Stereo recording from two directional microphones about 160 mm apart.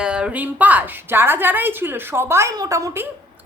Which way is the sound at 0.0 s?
5° right (ahead or behind).